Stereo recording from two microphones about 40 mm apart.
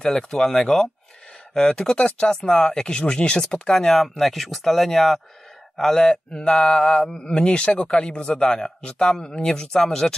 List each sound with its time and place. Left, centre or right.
0.0 s speech: centre
1.5 s mantra: centre
3.8 s speech: centre
5.8 s mantra: centre